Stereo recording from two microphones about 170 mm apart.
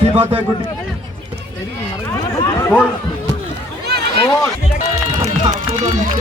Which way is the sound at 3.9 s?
70° right (ahead or behind).